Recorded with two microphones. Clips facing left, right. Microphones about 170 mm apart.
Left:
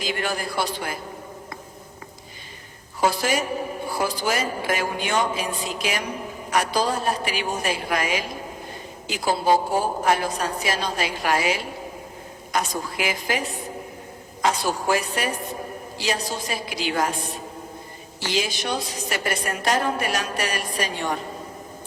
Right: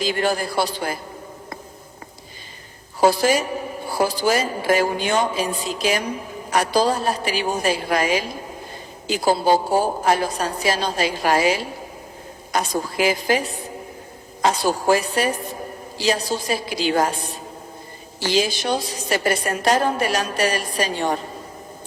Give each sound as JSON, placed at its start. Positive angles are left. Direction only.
{"t": 0.0, "sound": "a woman's voice", "side_deg": -30}
{"t": 3.0, "sound": "a woman's voice", "side_deg": -35}
{"t": 14.4, "sound": "a woman's voice", "side_deg": -35}
{"t": 18.2, "sound": "a woman's voice", "side_deg": -35}